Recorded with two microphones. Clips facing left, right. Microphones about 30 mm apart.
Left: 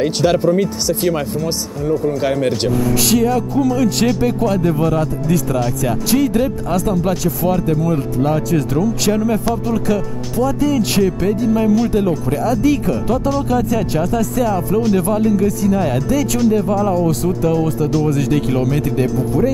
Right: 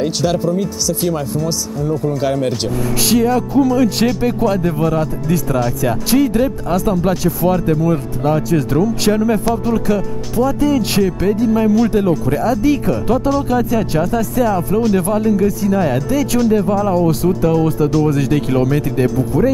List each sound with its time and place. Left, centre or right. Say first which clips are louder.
0.2 s speech: left 5 dB; left
2.2 s speech: right 1 dB; centre
2.9 s speech: right 3 dB; centre